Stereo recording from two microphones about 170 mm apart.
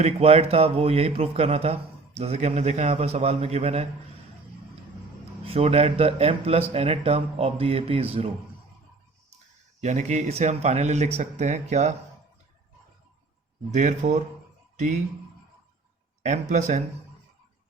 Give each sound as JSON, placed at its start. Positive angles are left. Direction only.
{"t": 0.0, "sound": "speech", "side_deg": -35}
{"t": 5.5, "sound": "speech", "side_deg": -35}
{"t": 9.8, "sound": "speech", "side_deg": -40}
{"t": 13.7, "sound": "speech", "side_deg": -45}
{"t": 16.2, "sound": "speech", "side_deg": -45}